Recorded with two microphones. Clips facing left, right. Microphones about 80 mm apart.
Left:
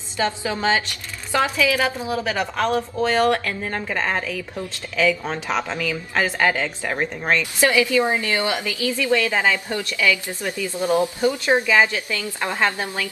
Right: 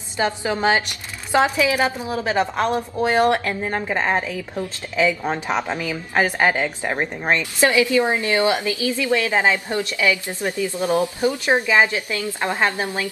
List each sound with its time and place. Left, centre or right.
0.2 s a woman's voice: right